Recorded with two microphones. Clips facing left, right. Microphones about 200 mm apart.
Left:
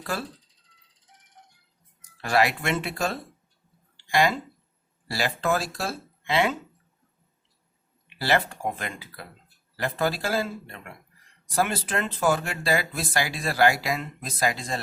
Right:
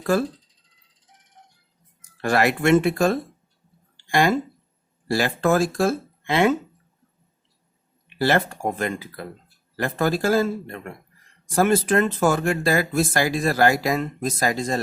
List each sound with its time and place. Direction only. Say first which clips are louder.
0.0 s speech: right 11 dB; 50° right (ahead or behind)
2.2 s speech: right 4 dB; 50° right (ahead or behind)
8.2 s speech: right 4 dB; 50° right (ahead or behind)